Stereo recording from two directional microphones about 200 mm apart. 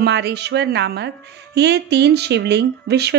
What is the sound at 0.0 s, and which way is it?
A woman's voice, 55° right (ahead or behind).